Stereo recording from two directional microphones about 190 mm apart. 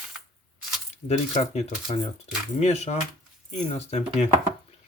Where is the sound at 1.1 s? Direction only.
35° left (ahead or behind).